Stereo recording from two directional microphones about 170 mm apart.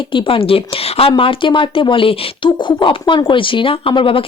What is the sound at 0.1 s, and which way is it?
Speech, 30° left (ahead or behind).